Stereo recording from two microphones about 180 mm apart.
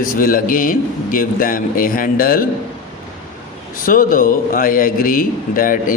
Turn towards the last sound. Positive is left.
turn(degrees=50)  # may be behind; listen again after turning